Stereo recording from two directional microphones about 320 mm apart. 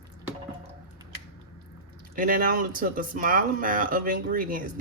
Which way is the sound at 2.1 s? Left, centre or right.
Right.